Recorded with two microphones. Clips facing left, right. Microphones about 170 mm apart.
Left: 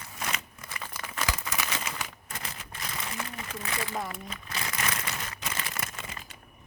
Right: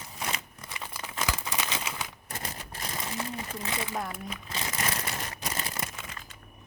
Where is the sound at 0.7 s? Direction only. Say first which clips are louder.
Even; 20° right (ahead or behind).